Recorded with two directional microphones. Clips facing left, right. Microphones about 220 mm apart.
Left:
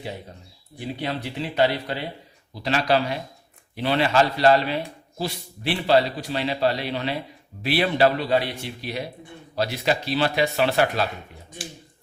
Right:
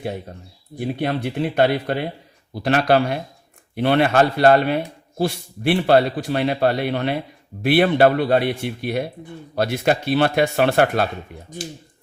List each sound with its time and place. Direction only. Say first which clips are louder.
0.8 s a man's voice: right 6 dB; 55° right (ahead or behind)